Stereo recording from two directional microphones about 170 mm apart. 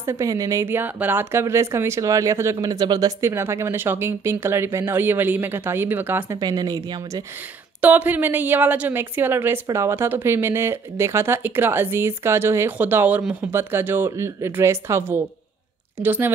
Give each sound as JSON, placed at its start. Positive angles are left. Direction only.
{"t": 0.0, "sound": "a woman's voice", "side_deg": -20}
{"t": 6.4, "sound": "speech", "side_deg": -25}
{"t": 7.8, "sound": "a woman's voice", "side_deg": -10}